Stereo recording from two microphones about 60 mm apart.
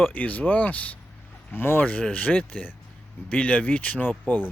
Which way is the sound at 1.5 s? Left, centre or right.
Left.